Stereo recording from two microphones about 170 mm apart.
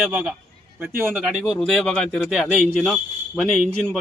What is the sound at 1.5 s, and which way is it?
A man's voice, centre (ahead or behind).